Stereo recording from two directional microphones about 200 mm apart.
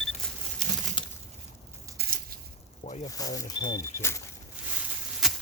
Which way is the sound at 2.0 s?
50° right (ahead or behind).